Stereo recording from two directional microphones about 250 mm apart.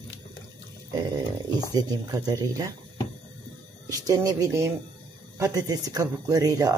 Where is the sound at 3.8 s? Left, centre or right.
Centre.